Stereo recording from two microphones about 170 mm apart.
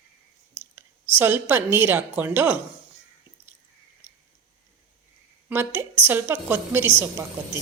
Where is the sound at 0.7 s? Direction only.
15° right (ahead or behind).